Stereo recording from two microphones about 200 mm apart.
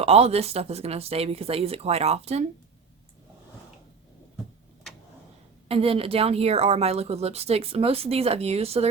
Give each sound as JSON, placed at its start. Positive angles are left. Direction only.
{"t": 0.0, "sound": "speech", "side_deg": -30}
{"t": 5.6, "sound": "speech", "side_deg": -30}